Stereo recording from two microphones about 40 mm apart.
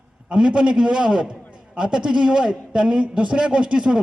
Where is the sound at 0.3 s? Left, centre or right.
Right.